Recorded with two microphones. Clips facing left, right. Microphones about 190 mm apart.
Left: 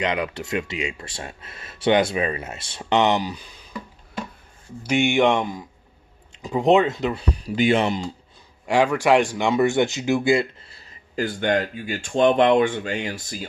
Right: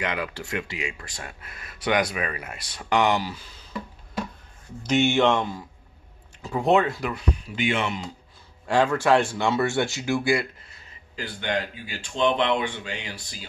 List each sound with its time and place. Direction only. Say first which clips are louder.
0.0 s speech: left 5 dB; 20° left (ahead or behind)
4.8 s speech: left 2 dB; 10° left (ahead or behind); by 8.0 s 35° left (ahead or behind)
8.6 s speech: left 2 dB; 15° left (ahead or behind)
11.1 s speech: left 7 dB; 45° left (ahead or behind)